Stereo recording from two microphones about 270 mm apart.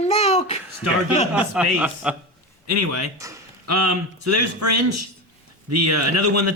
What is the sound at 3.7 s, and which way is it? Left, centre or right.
Speech, right.